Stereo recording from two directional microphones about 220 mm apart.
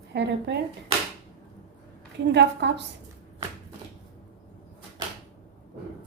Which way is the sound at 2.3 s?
50° right (ahead or behind).